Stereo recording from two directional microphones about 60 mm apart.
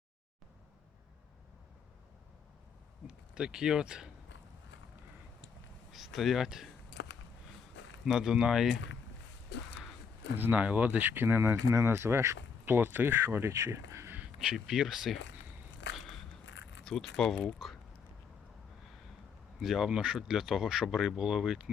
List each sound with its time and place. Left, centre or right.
3.1 s speech: centre
5.9 s speech: centre
8.0 s speech: centre
10.3 s speech: right
11.6 s speech: right
14.3 s speech: centre
16.0 s biting: centre
16.8 s speech: centre
19.5 s speech: centre